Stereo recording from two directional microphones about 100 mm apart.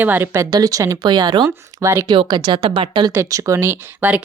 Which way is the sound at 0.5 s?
40° right (ahead or behind).